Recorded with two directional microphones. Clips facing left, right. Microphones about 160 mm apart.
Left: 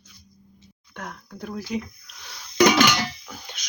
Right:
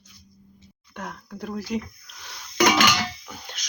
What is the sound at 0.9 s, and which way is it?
Speech, centre (ahead or behind).